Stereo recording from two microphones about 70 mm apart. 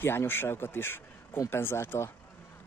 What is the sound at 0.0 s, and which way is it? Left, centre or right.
Speech, left.